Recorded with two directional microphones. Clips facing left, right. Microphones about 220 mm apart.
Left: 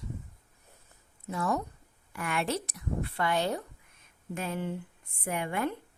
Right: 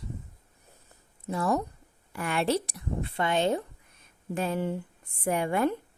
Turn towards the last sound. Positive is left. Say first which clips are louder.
# right 6 dB
turn(degrees=-35)  # may be behind; listen again after turning